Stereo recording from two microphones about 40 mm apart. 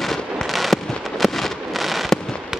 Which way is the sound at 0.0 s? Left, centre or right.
Centre.